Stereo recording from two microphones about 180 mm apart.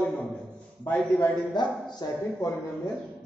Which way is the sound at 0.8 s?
10° left (ahead or behind).